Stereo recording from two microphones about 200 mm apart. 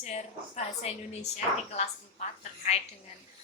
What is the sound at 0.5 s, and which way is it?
Speech, 35° left (ahead or behind).